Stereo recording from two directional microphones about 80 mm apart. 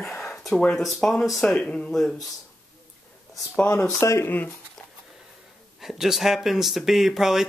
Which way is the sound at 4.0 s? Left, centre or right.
Left.